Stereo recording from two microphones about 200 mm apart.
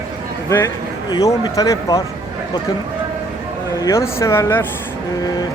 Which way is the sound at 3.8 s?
15° left (ahead or behind).